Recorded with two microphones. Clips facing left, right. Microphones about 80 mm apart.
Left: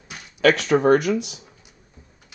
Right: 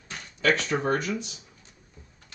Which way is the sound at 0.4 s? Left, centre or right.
Left.